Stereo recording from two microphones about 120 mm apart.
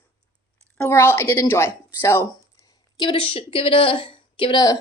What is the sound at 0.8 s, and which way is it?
Speech, 20° left (ahead or behind).